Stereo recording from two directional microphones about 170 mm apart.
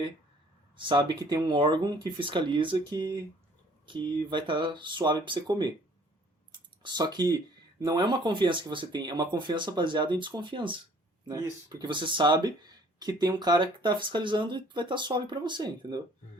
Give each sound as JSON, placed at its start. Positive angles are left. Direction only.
{"t": 0.8, "sound": "speech", "side_deg": -25}
{"t": 6.5, "sound": "a sound", "side_deg": -25}
{"t": 7.9, "sound": "speech", "side_deg": -25}